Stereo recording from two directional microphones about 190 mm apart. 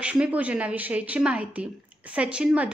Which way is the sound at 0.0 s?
5° right (ahead or behind).